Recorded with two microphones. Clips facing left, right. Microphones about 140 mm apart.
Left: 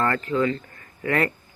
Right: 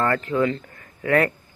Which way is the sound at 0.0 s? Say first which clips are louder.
Right 1 dB; centre (ahead or behind).